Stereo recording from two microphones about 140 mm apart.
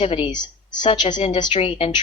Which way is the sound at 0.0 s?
45° left (ahead or behind).